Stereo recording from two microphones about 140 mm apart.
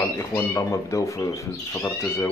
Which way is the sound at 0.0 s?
20° left (ahead or behind).